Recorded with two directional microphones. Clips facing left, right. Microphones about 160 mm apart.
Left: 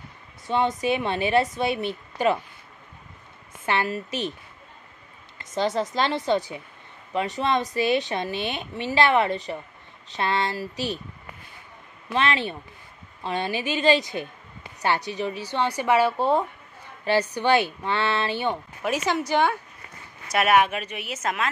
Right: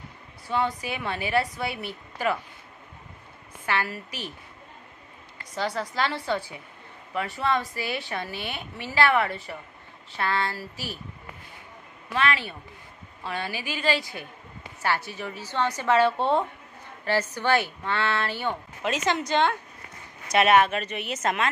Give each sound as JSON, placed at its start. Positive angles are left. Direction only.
{"t": 0.5, "sound": "a woman's voice", "side_deg": 20}
{"t": 3.6, "sound": "a woman's voice", "side_deg": 20}
{"t": 5.4, "sound": "a woman's voice", "side_deg": 20}
{"t": 12.1, "sound": "a woman's voice", "side_deg": 20}
{"t": 17.0, "sound": "a woman's voice", "side_deg": 15}